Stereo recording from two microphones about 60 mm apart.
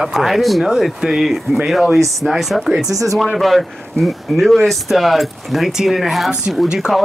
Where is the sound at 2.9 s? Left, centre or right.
Right.